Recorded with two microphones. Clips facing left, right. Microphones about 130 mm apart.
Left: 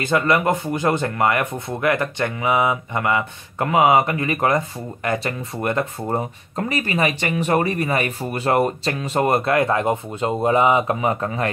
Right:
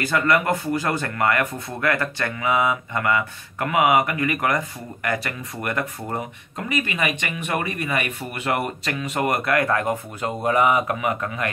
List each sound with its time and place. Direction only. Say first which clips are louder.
0.0 s speech: left 2 dB; 25° left (ahead or behind)